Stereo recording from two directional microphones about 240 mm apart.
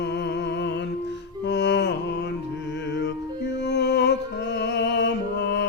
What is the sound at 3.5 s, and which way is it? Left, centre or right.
Music, left.